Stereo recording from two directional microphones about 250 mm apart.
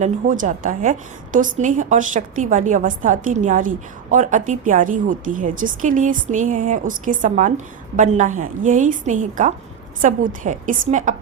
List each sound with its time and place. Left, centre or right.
0.0 s a woman's voice: right